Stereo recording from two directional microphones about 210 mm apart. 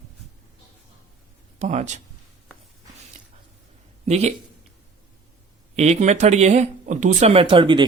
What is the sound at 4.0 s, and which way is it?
Speech, 30° right (ahead or behind).